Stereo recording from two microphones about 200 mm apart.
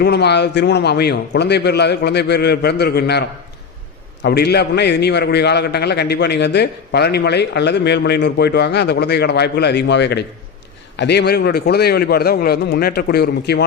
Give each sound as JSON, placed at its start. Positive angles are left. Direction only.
{"t": 0.0, "sound": "a man's voice", "side_deg": 55}